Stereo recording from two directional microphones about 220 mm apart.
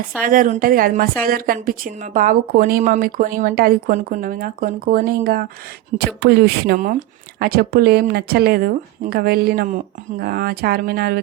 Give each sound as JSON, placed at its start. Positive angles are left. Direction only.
{"t": 0.2, "sound": "a woman's voice", "side_deg": -40}